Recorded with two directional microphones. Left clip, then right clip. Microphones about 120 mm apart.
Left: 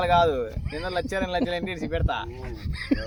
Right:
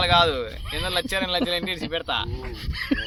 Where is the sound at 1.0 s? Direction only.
90° left.